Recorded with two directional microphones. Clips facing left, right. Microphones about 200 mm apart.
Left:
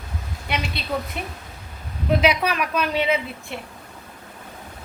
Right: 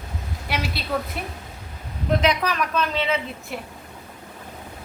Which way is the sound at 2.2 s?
10° left (ahead or behind).